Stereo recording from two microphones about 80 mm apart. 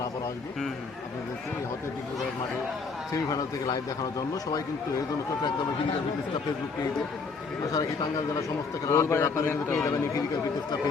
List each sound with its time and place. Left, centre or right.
3.2 s a man's voice: left
7.7 s a man's voice: left
8.9 s a man's voice: left